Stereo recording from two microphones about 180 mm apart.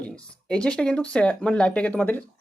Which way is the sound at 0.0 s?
5° left (ahead or behind).